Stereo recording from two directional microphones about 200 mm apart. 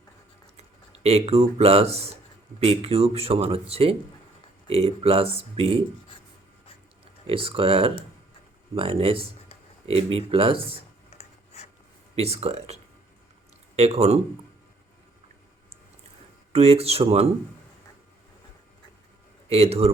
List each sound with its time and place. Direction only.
0.5 s speech: 30° right (ahead or behind)
7.3 s speech: 25° right (ahead or behind)
11.1 s a sound: 30° left (ahead or behind)
12.1 s speech: 30° right (ahead or behind)
16.5 s speech: 30° right (ahead or behind)
19.5 s speech: 30° right (ahead or behind)